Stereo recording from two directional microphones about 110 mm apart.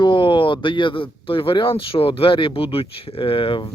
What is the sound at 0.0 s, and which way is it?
Speech, 45° left (ahead or behind).